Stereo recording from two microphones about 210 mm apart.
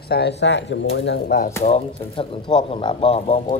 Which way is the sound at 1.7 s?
25° left (ahead or behind).